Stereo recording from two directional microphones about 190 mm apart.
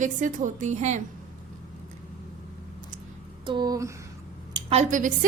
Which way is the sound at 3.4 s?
20° right (ahead or behind).